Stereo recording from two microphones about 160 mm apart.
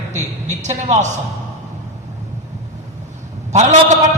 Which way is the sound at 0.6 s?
45° right (ahead or behind).